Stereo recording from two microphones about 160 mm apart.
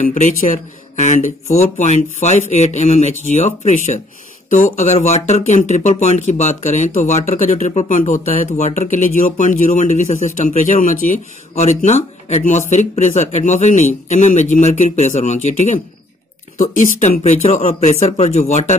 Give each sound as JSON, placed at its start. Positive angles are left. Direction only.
{"t": 0.9, "sound": "speech", "side_deg": 50}